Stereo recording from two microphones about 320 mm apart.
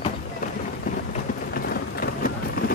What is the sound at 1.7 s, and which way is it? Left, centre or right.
Clip-clop, left.